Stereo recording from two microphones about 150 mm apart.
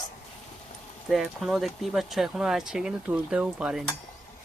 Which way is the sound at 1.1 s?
Centre (ahead or behind).